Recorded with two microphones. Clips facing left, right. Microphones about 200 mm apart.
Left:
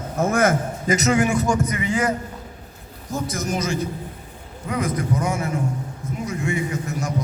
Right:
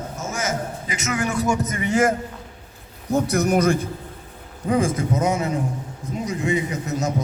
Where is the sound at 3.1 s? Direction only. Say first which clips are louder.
Right 6 dB; 65° right (ahead or behind).